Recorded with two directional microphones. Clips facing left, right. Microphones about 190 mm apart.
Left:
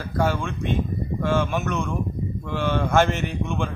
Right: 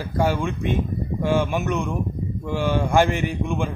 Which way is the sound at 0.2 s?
15° right (ahead or behind).